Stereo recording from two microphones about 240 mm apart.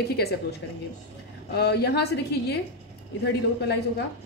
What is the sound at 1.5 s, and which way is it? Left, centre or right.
A woman's voice, left.